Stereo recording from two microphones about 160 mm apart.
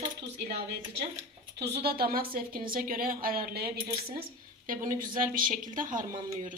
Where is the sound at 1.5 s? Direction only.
90° right; by 3.9 s 70° right (ahead or behind).